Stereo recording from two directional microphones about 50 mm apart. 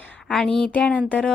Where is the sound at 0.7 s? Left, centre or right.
Left.